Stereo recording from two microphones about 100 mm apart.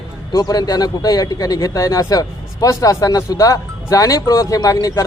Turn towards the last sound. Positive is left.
turn(degrees=35)  # may be behind; listen again after turning